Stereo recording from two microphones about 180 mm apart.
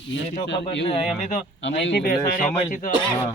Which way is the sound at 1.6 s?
90° left.